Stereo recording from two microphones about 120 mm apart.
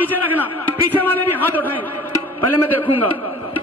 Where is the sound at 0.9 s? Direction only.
15° left (ahead or behind).